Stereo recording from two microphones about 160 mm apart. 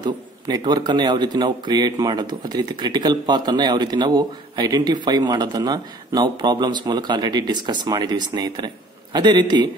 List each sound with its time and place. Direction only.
0.0 s a man's voice: 25° right (ahead or behind)